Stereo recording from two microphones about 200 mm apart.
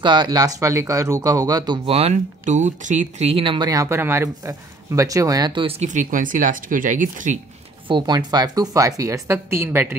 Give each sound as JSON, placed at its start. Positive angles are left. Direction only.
{"t": 0.0, "sound": "speech", "side_deg": -20}
{"t": 7.9, "sound": "a woman's voice", "side_deg": -20}